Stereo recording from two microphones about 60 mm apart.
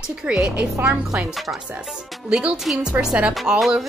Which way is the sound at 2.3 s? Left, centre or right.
Centre.